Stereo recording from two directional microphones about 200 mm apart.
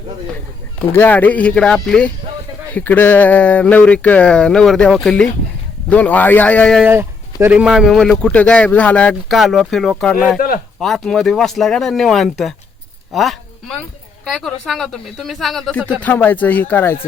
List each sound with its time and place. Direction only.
0.8 s speech: 10° left (ahead or behind)
6.8 s speech: 10° right (ahead or behind)
10.3 s a man's voice: 45° left (ahead or behind)
10.8 s speech: centre (ahead or behind)
16.0 s speech: 10° left (ahead or behind)